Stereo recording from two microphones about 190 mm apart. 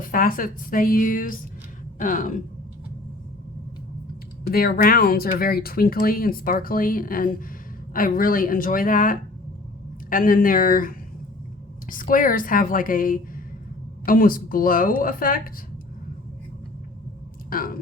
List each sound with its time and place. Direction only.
0.1 s speech: 50° left (ahead or behind)
4.5 s speech: 50° left (ahead or behind)
17.5 s a sound: 50° left (ahead or behind)